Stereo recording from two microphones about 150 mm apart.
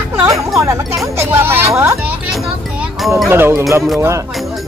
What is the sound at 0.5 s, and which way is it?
Speech, 20° right (ahead or behind).